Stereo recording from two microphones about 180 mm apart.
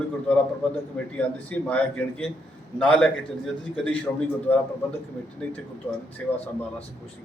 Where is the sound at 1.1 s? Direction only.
5° left (ahead or behind).